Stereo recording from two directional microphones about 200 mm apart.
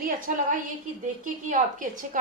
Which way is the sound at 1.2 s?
40° right (ahead or behind).